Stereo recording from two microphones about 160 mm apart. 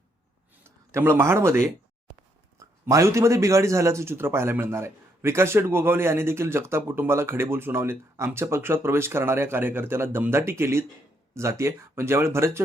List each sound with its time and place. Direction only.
0.9 s a man's voice: 15° right (ahead or behind)